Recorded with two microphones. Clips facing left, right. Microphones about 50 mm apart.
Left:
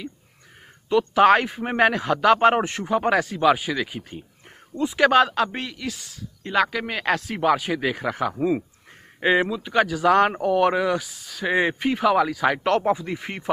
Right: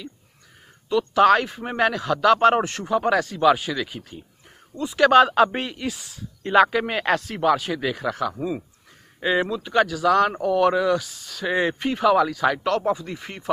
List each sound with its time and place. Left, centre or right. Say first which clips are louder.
1.1 s a man's voice: even; left
4.8 s speech: left 4 dB; left
5.3 s speech: right 5 dB; centre
7.3 s a man's voice: even; centre
9.5 s speech: right 1 dB; centre
9.8 s a man's voice: left 1 dB; left
12.6 s a man's voice: left 2 dB; left